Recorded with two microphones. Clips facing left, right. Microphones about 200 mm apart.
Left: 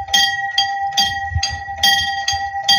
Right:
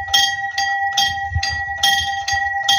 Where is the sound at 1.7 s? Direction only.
15° left (ahead or behind).